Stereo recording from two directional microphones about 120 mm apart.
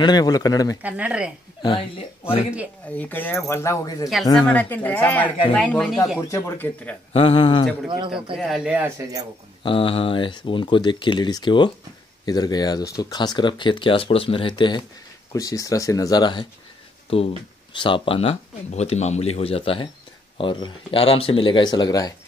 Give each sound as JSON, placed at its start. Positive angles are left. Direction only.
{"t": 0.0, "sound": "speech", "side_deg": 35}
{"t": 0.8, "sound": "speech", "side_deg": -10}
{"t": 1.6, "sound": "speech", "side_deg": 45}
{"t": 2.9, "sound": "speech", "side_deg": 15}
{"t": 4.5, "sound": "speech", "side_deg": 15}
{"t": 6.2, "sound": "speech", "side_deg": 25}
{"t": 7.1, "sound": "speech", "side_deg": 50}
{"t": 8.5, "sound": "speech", "side_deg": -15}
{"t": 9.6, "sound": "speech", "side_deg": 45}
{"t": 15.3, "sound": "speech", "side_deg": 30}
{"t": 17.1, "sound": "speech", "side_deg": 50}